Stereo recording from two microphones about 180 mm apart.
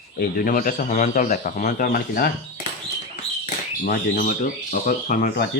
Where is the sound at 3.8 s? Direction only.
55° left (ahead or behind).